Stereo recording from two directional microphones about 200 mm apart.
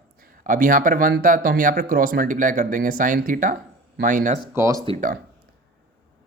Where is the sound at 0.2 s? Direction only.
40° right (ahead or behind).